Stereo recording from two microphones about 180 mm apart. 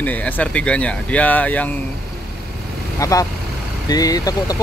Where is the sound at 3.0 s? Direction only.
20° left (ahead or behind).